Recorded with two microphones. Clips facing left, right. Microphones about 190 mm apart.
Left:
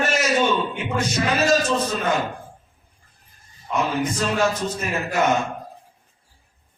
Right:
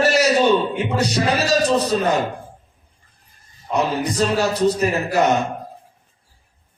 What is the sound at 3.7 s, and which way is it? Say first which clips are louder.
A man's voice: right 2 dB; 35° right (ahead or behind).